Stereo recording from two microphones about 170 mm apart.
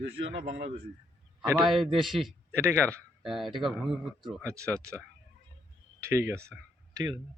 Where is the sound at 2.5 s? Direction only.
15° right (ahead or behind).